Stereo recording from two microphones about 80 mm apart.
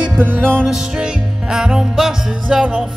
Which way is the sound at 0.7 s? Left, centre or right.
Centre.